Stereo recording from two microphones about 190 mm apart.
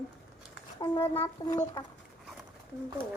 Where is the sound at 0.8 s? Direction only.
20° left (ahead or behind).